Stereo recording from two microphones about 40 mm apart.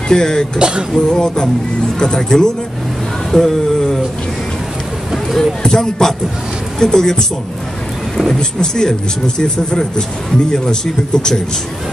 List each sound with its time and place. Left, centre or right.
0.1 s a man's voice: centre
0.6 s a sound: right
1.0 s a man's voice: centre
5.1 s a sound: centre
5.6 s a man's voice: centre
8.4 s a man's voice: centre